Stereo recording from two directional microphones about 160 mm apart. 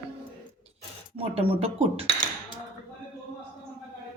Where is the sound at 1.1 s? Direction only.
35° right (ahead or behind).